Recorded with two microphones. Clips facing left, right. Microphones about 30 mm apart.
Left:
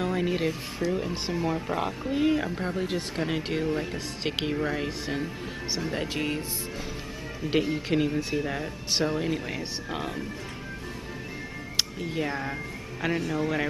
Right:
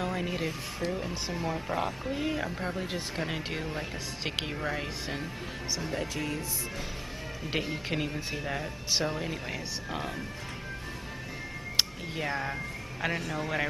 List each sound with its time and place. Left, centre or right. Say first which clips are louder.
0.0 s speech: left 5 dB; centre
5.9 s speech: left 5 dB; left
7.4 s speech: left 7 dB; centre
12.0 s speech: left 3 dB; centre